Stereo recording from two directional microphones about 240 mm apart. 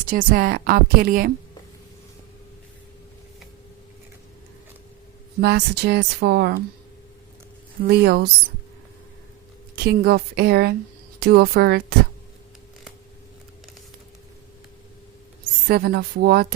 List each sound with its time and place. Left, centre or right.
0.1 s a woman's voice: right
5.4 s speech: right
7.9 s a woman's voice: right
9.7 s a woman's voice: right
15.6 s a woman's voice: right